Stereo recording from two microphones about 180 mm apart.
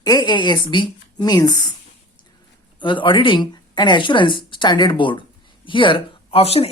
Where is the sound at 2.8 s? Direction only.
25° left (ahead or behind).